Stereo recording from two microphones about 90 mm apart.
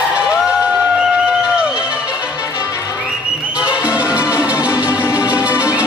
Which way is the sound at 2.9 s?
10° right (ahead or behind).